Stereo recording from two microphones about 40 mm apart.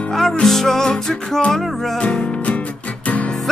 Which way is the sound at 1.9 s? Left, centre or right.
Left.